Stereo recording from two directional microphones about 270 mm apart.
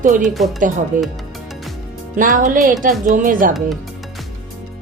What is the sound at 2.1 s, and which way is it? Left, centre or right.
Speech, right.